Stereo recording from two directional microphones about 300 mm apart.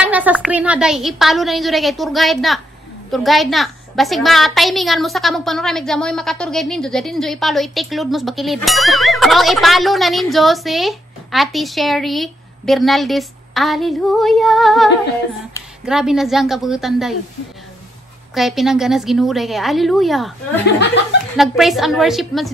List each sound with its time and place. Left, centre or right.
0.0 s a woman's voice: centre
18.3 s a woman's voice: centre
20.6 s speech: left
21.4 s a woman's voice: centre